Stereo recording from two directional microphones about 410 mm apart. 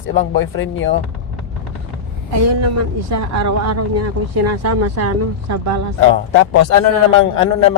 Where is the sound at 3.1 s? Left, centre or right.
Right.